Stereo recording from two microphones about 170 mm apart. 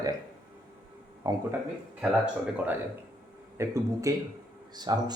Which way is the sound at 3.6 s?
15° right (ahead or behind).